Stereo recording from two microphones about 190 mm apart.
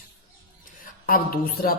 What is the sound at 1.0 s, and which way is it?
Speech, 50° left (ahead or behind).